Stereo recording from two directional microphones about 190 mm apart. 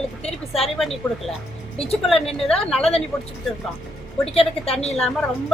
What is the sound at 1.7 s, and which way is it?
Speech, 30° left (ahead or behind).